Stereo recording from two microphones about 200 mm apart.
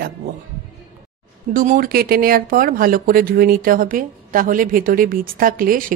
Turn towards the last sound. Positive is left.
turn(degrees=-45)  # may be behind; listen again after turning